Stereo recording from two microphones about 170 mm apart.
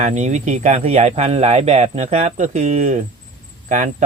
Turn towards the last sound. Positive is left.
turn(degrees=-45)  # may be behind; listen again after turning